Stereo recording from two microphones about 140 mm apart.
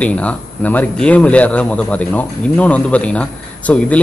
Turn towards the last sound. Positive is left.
turn(degrees=10)  # may be behind; listen again after turning